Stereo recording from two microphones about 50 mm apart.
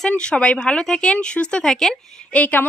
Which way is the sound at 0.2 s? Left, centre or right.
Left.